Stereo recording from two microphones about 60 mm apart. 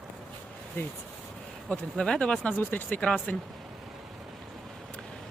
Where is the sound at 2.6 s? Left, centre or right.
Left.